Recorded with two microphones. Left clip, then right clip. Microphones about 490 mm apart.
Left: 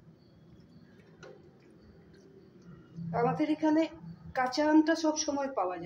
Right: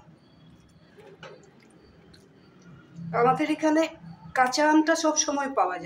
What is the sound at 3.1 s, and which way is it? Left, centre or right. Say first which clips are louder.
A woman's voice: right 7 dB; left.